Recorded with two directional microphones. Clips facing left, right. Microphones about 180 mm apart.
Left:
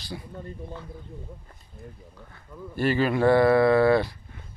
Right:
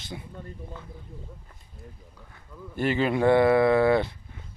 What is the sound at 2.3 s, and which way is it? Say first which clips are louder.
Speech: left 2 dB; 20° right (ahead or behind).